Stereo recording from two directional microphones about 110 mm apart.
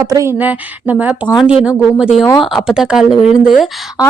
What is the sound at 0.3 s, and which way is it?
Speech, 15° right (ahead or behind).